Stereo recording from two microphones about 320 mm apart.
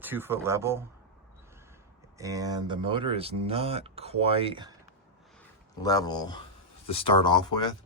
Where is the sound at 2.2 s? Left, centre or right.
Centre.